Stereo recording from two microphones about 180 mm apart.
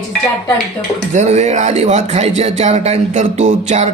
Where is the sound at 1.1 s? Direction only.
40° right (ahead or behind).